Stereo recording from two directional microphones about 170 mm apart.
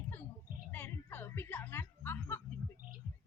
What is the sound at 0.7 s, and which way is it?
Music, 10° left (ahead or behind).